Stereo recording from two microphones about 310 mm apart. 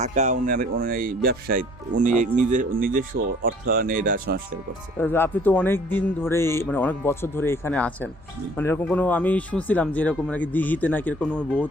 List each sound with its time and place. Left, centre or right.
0.0 s speech: right
4.9 s speech: centre